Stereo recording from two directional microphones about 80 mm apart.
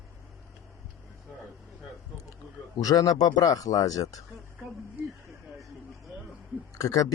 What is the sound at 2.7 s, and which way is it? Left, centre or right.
Speech, left.